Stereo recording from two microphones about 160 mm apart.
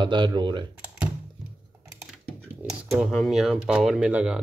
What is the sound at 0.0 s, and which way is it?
Speech, 30° right (ahead or behind).